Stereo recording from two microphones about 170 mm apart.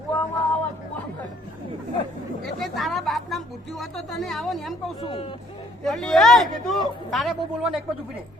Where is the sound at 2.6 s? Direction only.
Centre (ahead or behind).